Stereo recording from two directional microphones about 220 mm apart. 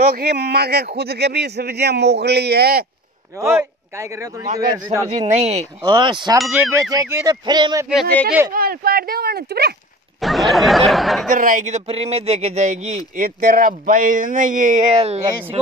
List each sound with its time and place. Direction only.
0.1 s speech: 45° right (ahead or behind)
3.3 s a man's voice: 10° right (ahead or behind)
5.2 s a man's voice: 30° right (ahead or behind)
5.8 s speech: 20° right (ahead or behind)
8.5 s speech: 40° right (ahead or behind)
10.2 s a sound: centre (ahead or behind)
11.2 s speech: 35° right (ahead or behind)